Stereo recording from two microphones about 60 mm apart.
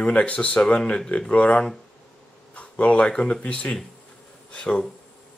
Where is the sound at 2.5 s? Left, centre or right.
Left.